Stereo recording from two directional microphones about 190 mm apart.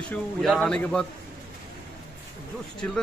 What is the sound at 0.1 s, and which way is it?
Speech, 5° left (ahead or behind).